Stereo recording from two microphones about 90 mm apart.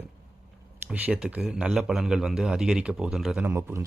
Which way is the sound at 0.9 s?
15° right (ahead or behind).